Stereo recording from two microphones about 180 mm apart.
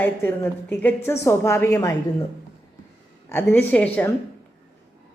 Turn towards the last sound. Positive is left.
turn(degrees=10)  # may be behind; listen again after turning